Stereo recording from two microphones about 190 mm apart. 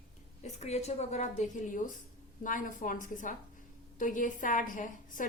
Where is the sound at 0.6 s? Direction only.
35° left (ahead or behind).